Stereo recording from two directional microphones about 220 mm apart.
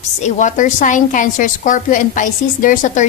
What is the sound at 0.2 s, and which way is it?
A woman's voice, 35° left (ahead or behind).